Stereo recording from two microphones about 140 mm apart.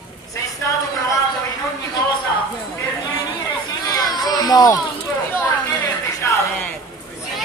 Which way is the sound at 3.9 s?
30° left (ahead or behind).